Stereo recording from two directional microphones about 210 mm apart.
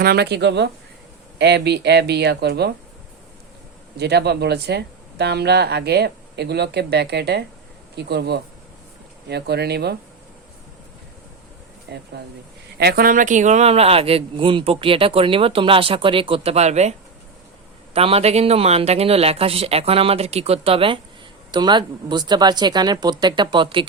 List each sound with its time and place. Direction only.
0.0 s speech: 50° right (ahead or behind)
3.9 s speech: 50° right (ahead or behind)
11.9 s speech: 50° right (ahead or behind); by 16.9 s 30° right (ahead or behind)
17.9 s speech: 25° right (ahead or behind)